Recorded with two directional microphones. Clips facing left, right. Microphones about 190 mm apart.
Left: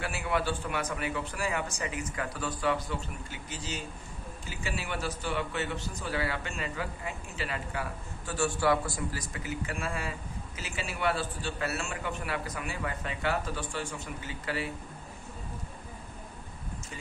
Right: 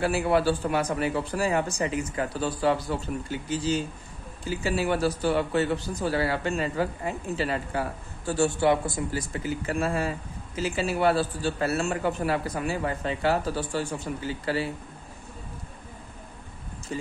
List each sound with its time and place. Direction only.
0.0 s a man's voice: 35° right (ahead or behind)
16.9 s speech: 35° right (ahead or behind)